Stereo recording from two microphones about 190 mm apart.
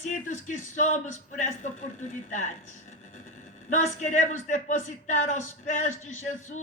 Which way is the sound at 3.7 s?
40° left (ahead or behind).